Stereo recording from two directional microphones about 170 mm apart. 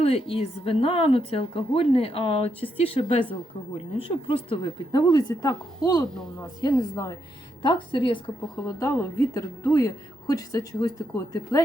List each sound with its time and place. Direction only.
0.0 s a woman's voice: 35° left (ahead or behind)
8.6 s a woman's voice: 15° left (ahead or behind)